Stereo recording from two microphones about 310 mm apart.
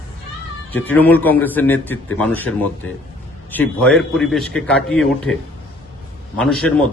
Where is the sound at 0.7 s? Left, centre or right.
Centre.